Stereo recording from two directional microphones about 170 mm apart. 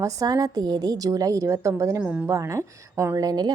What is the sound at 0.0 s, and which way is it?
Speech, 20° right (ahead or behind).